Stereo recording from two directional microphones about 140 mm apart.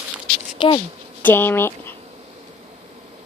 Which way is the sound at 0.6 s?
35° left (ahead or behind).